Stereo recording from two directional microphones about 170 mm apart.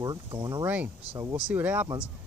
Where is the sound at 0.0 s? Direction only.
25° right (ahead or behind).